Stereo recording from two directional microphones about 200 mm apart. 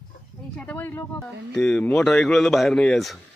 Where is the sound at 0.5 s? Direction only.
10° left (ahead or behind).